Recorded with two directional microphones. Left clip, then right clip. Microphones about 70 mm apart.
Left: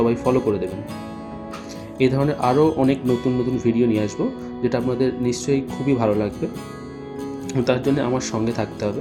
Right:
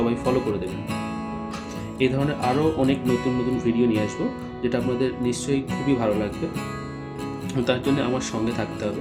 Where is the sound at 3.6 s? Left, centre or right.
Left.